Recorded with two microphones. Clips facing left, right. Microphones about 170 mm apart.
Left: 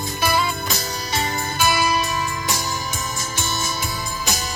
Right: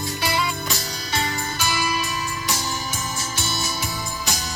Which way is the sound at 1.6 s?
50° left (ahead or behind).